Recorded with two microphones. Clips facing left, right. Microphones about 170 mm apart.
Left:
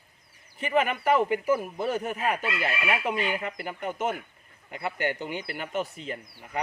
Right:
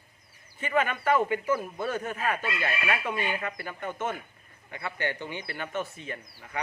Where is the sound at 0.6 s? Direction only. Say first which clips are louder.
Left 2 dB; 15° left (ahead or behind).